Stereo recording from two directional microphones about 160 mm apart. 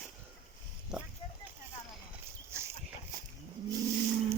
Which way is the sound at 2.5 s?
15° right (ahead or behind).